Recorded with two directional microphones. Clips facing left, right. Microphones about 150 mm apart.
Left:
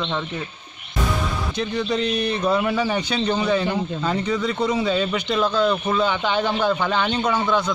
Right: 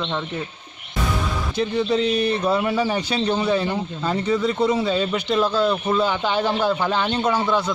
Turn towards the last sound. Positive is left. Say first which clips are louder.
# even
turn(degrees=-5)  # may be behind; listen again after turning